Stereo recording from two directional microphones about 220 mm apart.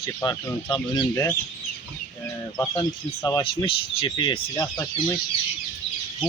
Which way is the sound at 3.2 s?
20° left (ahead or behind).